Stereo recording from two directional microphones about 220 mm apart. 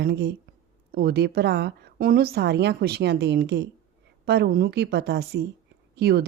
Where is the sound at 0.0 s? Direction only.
50° right (ahead or behind).